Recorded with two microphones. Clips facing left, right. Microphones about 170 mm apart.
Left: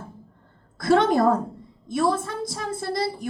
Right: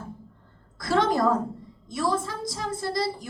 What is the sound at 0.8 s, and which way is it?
Speech, 60° left (ahead or behind).